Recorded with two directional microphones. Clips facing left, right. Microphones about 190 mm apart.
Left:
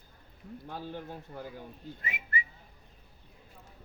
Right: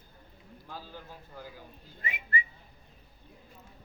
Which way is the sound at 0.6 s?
60° left (ahead or behind).